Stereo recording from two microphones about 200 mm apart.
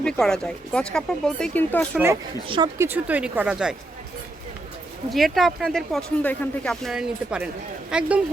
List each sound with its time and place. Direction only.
0.0 s speech: 5° left (ahead or behind)
2.5 s speech: 25° right (ahead or behind)
2.8 s a woman's voice: 10° right (ahead or behind)
5.1 s speech: centre (ahead or behind)